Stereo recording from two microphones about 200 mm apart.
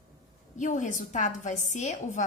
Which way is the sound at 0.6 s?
40° left (ahead or behind).